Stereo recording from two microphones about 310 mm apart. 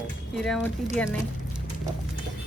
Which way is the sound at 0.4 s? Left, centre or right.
Centre.